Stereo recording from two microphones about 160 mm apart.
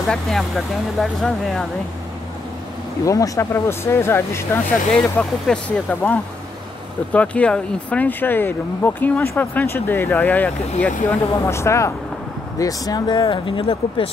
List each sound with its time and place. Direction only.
0.1 s speech: centre (ahead or behind)
3.1 s speech: 20° left (ahead or behind); by 14.1 s 35° left (ahead or behind)